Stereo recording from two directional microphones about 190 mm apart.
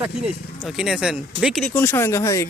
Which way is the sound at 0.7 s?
5° right (ahead or behind).